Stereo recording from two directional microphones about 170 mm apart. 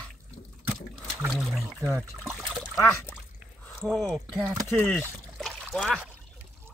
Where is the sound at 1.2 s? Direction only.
Centre (ahead or behind).